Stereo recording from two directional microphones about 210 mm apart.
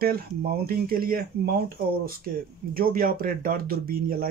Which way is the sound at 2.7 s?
45° right (ahead or behind).